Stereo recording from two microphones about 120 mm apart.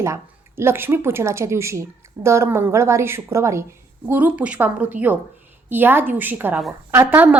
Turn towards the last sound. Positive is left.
turn(degrees=-20)  # may be behind; listen again after turning